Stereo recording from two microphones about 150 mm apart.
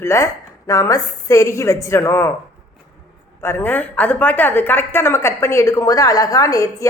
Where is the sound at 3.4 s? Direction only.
15° left (ahead or behind).